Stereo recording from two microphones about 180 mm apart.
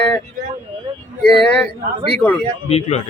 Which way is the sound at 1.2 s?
5° left (ahead or behind).